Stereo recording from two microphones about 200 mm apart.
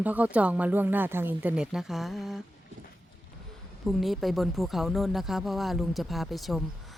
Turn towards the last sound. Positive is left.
turn(degrees=0)  # may be behind; listen again after turning